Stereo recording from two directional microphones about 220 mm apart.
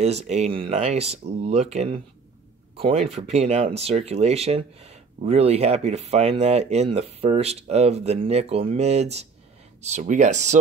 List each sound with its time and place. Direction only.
0.0 s speech: 30° right (ahead or behind)